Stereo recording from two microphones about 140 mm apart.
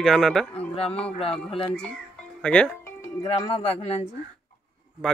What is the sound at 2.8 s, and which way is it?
Music, 25° left (ahead or behind).